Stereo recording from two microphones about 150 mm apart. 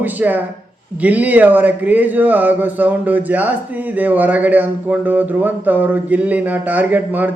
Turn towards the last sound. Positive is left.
turn(degrees=-10)  # may be behind; listen again after turning